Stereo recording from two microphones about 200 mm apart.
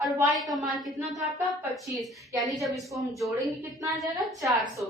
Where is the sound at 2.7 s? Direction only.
Centre (ahead or behind).